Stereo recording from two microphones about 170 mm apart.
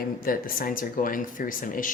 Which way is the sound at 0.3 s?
55° left (ahead or behind).